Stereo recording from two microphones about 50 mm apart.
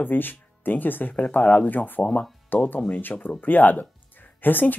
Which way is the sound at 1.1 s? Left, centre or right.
Left.